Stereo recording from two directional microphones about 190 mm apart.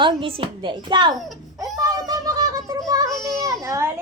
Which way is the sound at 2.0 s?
20° right (ahead or behind).